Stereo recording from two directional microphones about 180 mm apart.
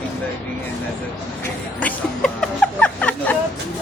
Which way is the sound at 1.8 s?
5° left (ahead or behind).